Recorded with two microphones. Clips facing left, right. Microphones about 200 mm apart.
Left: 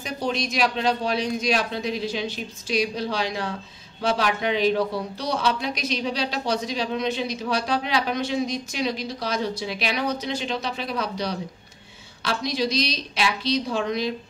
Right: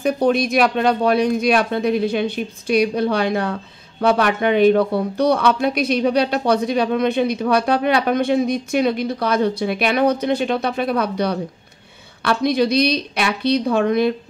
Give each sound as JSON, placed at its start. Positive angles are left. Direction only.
{"t": 0.0, "sound": "speech", "side_deg": -55}